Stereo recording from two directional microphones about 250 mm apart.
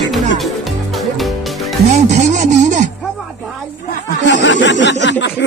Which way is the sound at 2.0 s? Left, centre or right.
Right.